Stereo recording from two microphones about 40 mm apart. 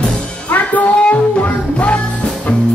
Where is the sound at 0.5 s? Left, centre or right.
Left.